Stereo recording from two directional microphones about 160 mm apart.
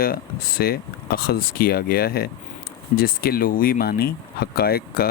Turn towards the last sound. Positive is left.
turn(degrees=70)  # may be behind; listen again after turning